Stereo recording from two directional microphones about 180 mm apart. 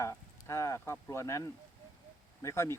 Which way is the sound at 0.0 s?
15° left (ahead or behind).